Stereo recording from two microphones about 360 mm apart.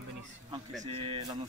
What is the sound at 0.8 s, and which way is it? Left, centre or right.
Speech, centre.